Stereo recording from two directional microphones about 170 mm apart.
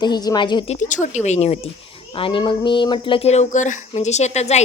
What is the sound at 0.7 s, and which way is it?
Speech, 45° left (ahead or behind).